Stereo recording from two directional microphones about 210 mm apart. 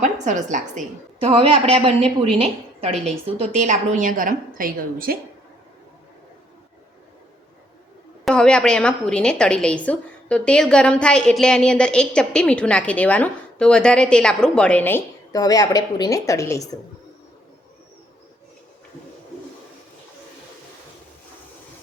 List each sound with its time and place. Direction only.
0.0 s a woman's voice: 35° right (ahead or behind)
8.2 s a woman's voice: 5° left (ahead or behind)